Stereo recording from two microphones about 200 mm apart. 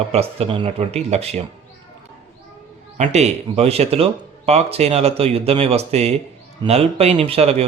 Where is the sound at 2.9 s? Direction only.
35° right (ahead or behind).